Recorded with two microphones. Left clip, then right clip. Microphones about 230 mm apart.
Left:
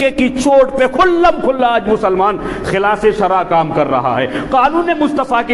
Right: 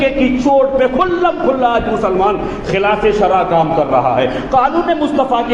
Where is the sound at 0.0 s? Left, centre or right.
Left.